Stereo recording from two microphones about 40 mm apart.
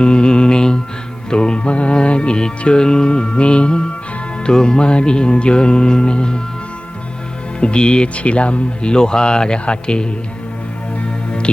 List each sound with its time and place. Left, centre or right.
0.0 s mantra: left
1.3 s music: left
4.4 s speech: left
7.6 s speech: left
11.0 s music: left